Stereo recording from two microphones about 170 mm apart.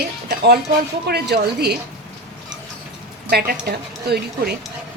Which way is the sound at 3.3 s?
65° right (ahead or behind).